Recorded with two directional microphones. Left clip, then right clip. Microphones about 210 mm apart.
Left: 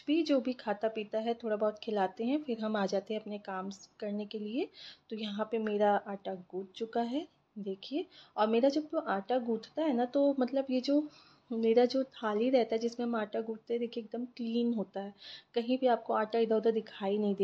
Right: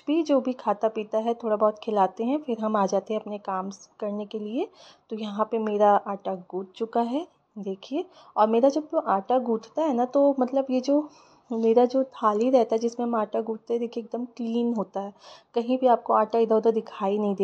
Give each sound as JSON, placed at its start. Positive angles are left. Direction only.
{"t": 0.0, "sound": "speech", "side_deg": -15}